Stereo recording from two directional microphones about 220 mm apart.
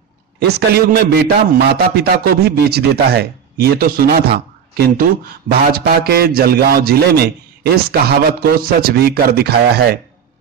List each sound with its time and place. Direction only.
0.4 s a man's voice: 45° right (ahead or behind)